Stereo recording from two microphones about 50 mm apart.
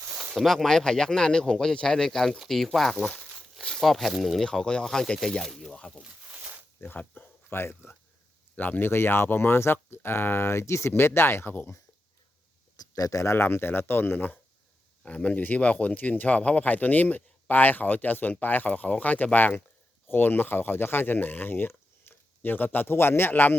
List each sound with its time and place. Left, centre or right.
0.3 s speech: centre
3.6 s tearing: centre
4.2 s speech: centre
4.4 s speech: centre
5.7 s speech: left
6.3 s a sound: right
6.7 s speech: left
8.5 s speech: left
8.9 s speech: left
13.3 s speech: left
15.0 s speech: left
20.1 s speech: left